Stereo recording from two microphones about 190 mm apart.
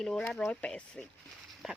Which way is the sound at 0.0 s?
5° left (ahead or behind).